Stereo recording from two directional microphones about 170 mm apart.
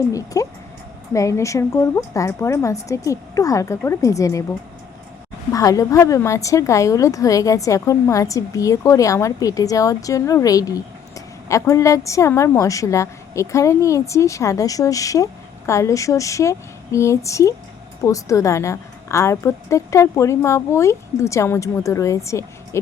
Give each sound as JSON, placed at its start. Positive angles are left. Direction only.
{"t": 0.1, "sound": "a woman's voice", "side_deg": 20}
{"t": 5.5, "sound": "a woman's voice", "side_deg": 20}